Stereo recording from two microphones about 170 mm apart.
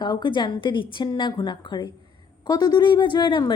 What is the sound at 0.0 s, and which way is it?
A woman's voice, 25° left (ahead or behind).